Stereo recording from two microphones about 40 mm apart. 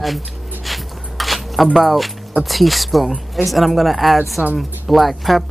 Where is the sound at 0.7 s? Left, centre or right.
Centre.